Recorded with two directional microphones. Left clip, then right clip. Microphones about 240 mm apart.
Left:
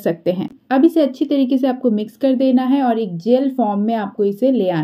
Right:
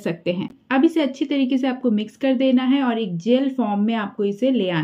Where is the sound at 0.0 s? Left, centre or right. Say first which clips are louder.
Left 6 dB; centre.